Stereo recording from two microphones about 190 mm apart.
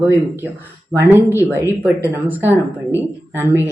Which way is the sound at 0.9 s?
10° right (ahead or behind).